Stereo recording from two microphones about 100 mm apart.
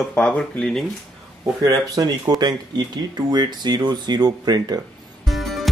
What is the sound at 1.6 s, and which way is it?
Speech, 40° right (ahead or behind).